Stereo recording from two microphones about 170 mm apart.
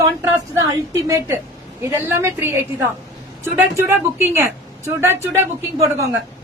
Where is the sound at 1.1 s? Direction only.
15° right (ahead or behind).